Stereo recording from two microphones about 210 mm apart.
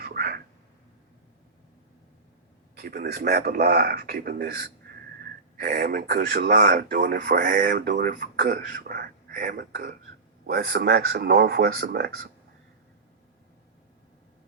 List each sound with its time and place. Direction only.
0.0 s a sound: 45° right (ahead or behind)
2.7 s speech: 45° right (ahead or behind)
6.5 s speech: 40° right (ahead or behind)